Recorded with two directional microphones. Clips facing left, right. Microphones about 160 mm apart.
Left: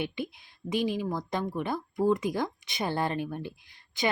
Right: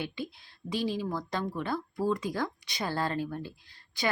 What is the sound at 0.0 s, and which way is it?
Speech, 20° left (ahead or behind).